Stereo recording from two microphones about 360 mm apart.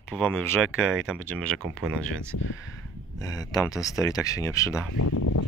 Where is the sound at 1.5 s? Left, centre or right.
Centre.